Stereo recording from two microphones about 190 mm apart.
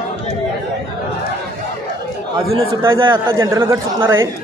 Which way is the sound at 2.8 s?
25° right (ahead or behind).